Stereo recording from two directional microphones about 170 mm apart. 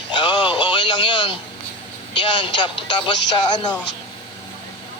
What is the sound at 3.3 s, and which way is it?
Speech, 25° left (ahead or behind).